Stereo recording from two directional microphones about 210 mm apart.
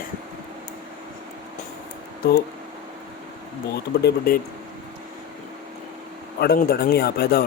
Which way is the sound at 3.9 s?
50° left (ahead or behind).